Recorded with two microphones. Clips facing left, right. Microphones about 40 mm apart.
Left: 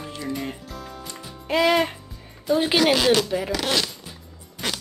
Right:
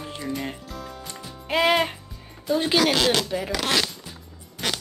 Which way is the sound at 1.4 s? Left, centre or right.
Centre.